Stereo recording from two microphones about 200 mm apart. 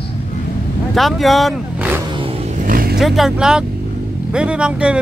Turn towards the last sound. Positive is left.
turn(degrees=-5)  # may be behind; listen again after turning